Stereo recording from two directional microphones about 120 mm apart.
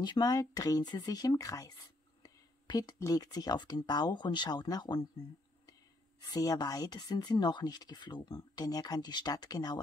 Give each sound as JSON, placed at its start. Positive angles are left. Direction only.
{"t": 0.0, "sound": "speech", "side_deg": 35}
{"t": 6.2, "sound": "speech", "side_deg": 30}